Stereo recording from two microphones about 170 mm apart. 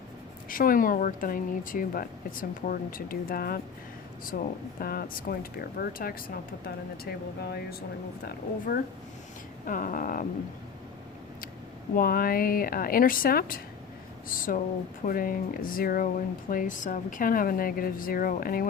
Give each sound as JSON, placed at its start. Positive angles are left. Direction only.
{"t": 0.4, "sound": "speech", "side_deg": 55}
{"t": 11.9, "sound": "speech", "side_deg": 60}